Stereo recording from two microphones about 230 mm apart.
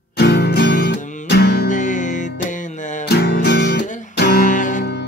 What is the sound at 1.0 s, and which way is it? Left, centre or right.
Music, left.